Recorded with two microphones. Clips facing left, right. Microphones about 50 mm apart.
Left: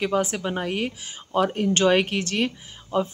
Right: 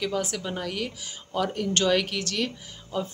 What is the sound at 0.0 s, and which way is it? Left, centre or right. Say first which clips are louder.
Speech: left 5 dB; left.